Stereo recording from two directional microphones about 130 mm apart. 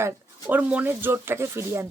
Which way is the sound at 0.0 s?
15° right (ahead or behind).